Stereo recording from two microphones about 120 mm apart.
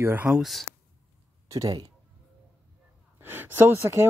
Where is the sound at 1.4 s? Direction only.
25° right (ahead or behind).